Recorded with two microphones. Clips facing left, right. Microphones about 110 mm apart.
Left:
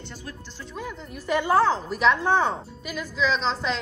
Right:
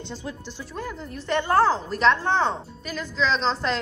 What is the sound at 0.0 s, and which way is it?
Speech, 20° right (ahead or behind).